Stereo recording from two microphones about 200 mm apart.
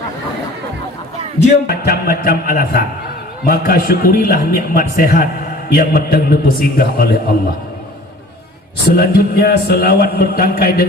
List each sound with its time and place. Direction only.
1.6 s a man's voice: 50° left (ahead or behind)
8.9 s a man's voice: 50° left (ahead or behind)